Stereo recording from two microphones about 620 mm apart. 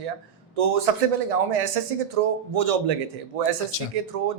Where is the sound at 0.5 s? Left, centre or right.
Right.